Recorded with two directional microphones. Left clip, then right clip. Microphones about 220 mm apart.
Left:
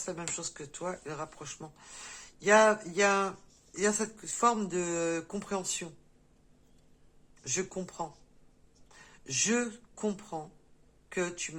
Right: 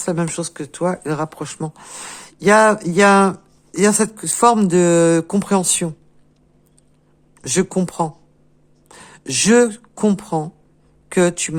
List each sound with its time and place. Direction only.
0.0 s speech: 50° right (ahead or behind)
7.4 s speech: 50° right (ahead or behind)